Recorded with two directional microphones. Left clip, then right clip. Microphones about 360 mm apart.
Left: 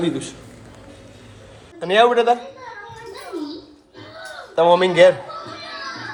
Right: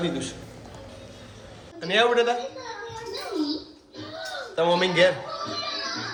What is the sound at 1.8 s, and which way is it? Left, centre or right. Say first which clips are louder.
Speech: left 6 dB; centre.